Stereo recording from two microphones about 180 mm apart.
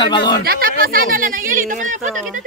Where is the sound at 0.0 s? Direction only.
25° left (ahead or behind).